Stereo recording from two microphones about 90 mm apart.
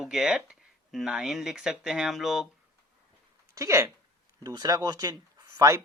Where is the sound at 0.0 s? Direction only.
5° right (ahead or behind).